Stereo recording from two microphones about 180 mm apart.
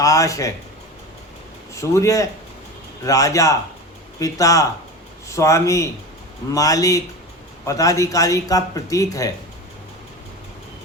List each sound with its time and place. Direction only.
0.0 s a man's voice: 20° left (ahead or behind)
1.7 s a man's voice: 15° left (ahead or behind)